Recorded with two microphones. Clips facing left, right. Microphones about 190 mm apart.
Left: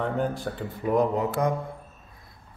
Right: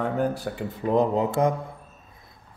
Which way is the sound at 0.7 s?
25° right (ahead or behind).